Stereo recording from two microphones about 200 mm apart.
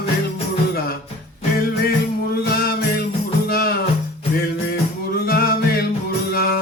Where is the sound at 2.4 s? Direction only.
50° left (ahead or behind).